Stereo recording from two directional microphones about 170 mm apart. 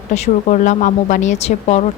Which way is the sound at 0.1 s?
45° left (ahead or behind).